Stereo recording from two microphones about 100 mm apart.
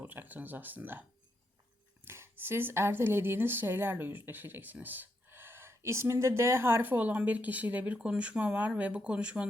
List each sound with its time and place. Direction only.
0.0 s speech: 20° right (ahead or behind)
2.0 s speech: 25° right (ahead or behind)